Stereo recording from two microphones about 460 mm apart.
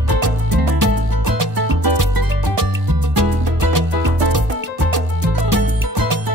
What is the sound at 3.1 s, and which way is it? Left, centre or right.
Music, right.